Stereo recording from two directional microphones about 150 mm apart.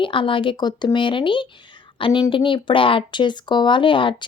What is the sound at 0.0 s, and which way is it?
A woman's voice, 35° left (ahead or behind).